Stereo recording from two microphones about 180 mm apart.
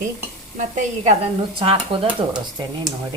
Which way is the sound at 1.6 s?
30° right (ahead or behind).